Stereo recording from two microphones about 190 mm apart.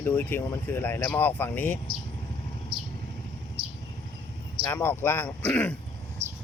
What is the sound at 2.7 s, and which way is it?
Vehicle, 25° right (ahead or behind).